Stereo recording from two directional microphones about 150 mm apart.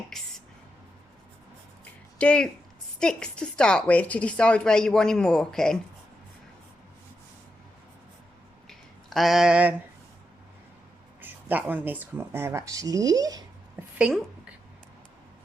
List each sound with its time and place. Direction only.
0.1 s speech: 5° left (ahead or behind)
1.8 s a sound: 10° left (ahead or behind)
3.0 s a woman's voice: 5° left (ahead or behind)
9.0 s a woman's voice: centre (ahead or behind)
11.2 s speech: 10° right (ahead or behind)
13.8 s a sound: 15° right (ahead or behind)